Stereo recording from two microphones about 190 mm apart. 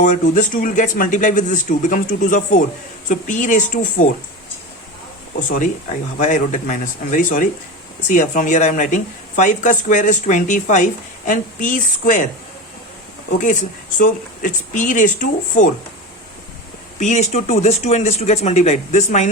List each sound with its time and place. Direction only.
0.0 s speech: 40° left (ahead or behind)
6.1 s speech: 40° left (ahead or behind)
13.4 s speech: 40° left (ahead or behind)
17.0 s speech: 40° left (ahead or behind)